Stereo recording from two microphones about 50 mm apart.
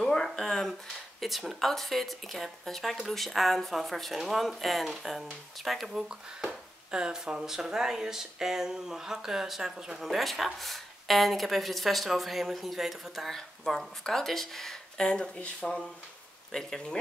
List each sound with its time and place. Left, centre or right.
0.0 s a sound: centre
1.2 s speech: centre
5.9 s speech: centre
9.9 s speech: centre
13.7 s speech: centre
15.0 s speech: centre
16.5 s speech: centre